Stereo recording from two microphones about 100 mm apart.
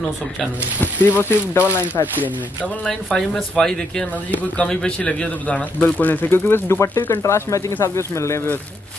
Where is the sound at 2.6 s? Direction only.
5° left (ahead or behind); by 8.5 s 25° left (ahead or behind).